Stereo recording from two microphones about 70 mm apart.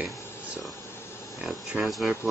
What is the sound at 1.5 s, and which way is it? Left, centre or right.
Speech, centre.